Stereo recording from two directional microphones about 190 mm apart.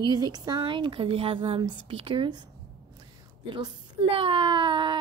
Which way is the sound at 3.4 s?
25° right (ahead or behind).